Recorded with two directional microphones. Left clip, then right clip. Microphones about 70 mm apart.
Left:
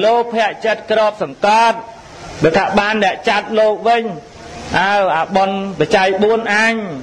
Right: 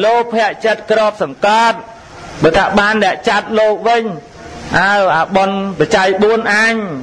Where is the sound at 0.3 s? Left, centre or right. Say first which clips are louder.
Right 2 dB; right.